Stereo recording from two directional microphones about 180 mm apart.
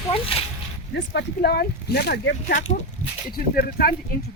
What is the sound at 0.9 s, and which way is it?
Speech, 70° left (ahead or behind).